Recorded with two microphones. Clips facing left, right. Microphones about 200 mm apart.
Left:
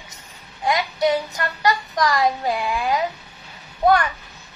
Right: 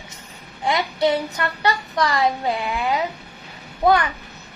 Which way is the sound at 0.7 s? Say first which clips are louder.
Even; 30° right (ahead or behind).